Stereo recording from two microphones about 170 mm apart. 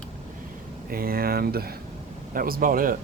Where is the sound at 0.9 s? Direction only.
60° right (ahead or behind).